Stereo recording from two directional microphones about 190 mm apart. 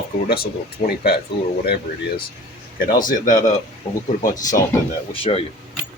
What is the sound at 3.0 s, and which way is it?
Speech, 45° left (ahead or behind).